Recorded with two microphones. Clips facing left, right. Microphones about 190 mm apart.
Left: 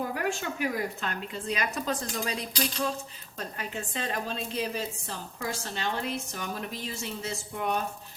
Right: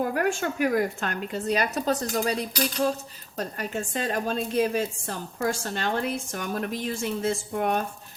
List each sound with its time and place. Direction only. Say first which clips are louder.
0.0 s a woman's voice: right 6 dB; 55° right (ahead or behind)